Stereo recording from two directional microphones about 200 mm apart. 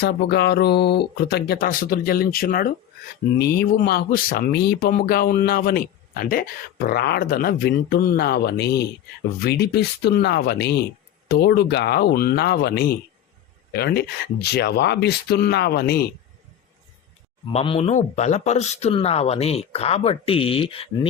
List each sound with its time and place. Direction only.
0.0 s speech: 55° left (ahead or behind)
17.5 s speech: 30° left (ahead or behind)